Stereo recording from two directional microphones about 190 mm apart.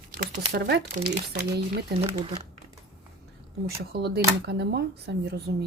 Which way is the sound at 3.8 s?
55° right (ahead or behind).